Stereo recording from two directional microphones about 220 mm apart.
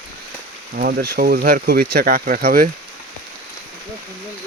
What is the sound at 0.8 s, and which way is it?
Speech, 40° right (ahead or behind).